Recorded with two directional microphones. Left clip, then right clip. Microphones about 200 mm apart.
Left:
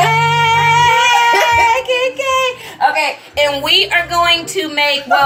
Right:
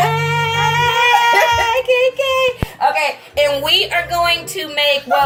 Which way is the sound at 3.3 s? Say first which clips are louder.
Left 2 dB; 10° right (ahead or behind).